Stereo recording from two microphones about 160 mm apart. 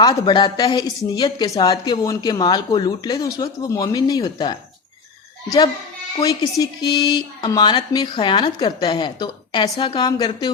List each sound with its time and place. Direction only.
0.0 s a woman's voice: 30° left (ahead or behind)
6.2 s a woman's voice: 25° left (ahead or behind)